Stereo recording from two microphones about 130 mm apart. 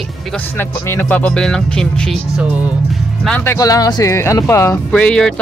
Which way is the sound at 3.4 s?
25° left (ahead or behind).